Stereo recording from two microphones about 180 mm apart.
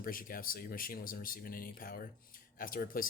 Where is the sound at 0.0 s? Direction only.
50° left (ahead or behind).